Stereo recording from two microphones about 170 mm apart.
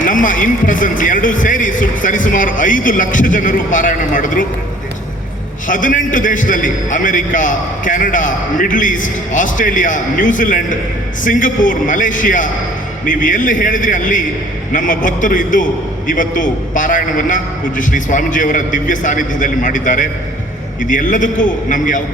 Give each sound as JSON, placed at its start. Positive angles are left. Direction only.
{"t": 0.0, "sound": "a man's voice", "side_deg": 50}
{"t": 5.6, "sound": "a man's voice", "side_deg": 50}